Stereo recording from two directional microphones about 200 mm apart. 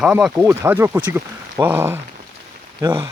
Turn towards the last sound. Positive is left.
turn(degrees=-15)  # may be behind; listen again after turning